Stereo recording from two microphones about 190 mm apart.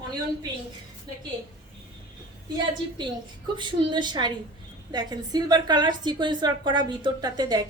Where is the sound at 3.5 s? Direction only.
25° right (ahead or behind).